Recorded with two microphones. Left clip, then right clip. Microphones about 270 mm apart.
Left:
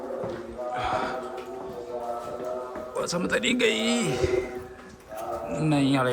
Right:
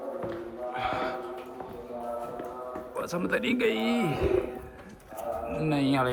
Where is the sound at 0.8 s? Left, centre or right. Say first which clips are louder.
Left 2 dB; centre.